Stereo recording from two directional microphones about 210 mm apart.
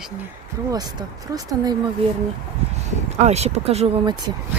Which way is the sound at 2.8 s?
30° right (ahead or behind).